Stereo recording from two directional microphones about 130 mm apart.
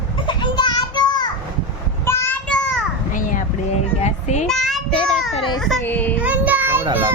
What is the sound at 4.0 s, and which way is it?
Child singing, 60° left (ahead or behind).